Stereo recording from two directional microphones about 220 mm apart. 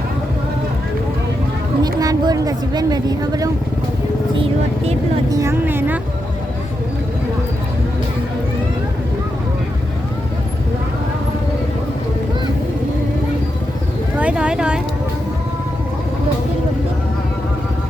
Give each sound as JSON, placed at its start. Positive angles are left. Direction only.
{"t": 1.8, "sound": "a woman's voice", "side_deg": -15}
{"t": 5.3, "sound": "a woman's voice", "side_deg": -15}
{"t": 14.2, "sound": "a sound", "side_deg": -5}